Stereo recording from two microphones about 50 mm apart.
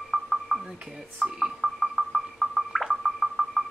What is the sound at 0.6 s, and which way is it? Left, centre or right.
Speech, centre.